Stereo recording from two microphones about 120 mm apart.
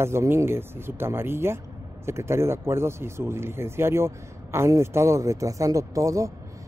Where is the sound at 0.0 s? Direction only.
20° right (ahead or behind).